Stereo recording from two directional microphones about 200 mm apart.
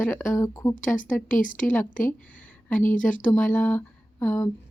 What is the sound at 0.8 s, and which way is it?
Speech, 40° left (ahead or behind).